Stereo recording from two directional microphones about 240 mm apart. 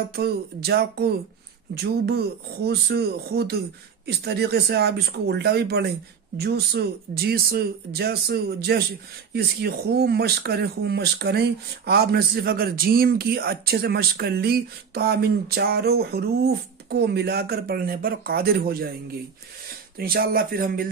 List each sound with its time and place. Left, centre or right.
0.1 s speech: right
20.0 s speech: right